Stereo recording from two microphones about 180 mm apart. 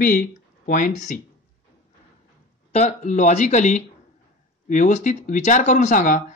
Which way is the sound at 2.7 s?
40° left (ahead or behind).